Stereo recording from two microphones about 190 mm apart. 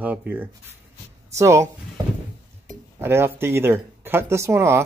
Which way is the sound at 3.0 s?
10° right (ahead or behind).